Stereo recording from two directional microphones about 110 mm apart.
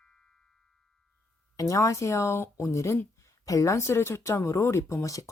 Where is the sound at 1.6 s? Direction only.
30° left (ahead or behind).